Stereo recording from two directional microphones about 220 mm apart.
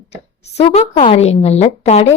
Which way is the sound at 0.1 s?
30° left (ahead or behind).